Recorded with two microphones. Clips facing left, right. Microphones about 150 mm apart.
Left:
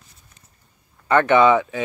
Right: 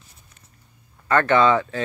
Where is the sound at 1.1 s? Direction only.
15° left (ahead or behind).